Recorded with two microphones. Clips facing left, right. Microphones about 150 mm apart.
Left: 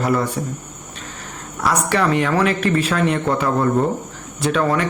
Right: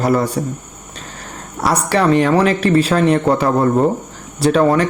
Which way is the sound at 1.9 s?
35° right (ahead or behind).